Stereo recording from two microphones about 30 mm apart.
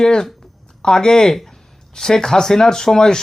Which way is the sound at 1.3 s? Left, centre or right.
Centre.